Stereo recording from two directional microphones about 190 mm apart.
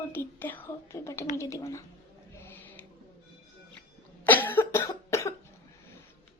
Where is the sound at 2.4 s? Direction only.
10° left (ahead or behind).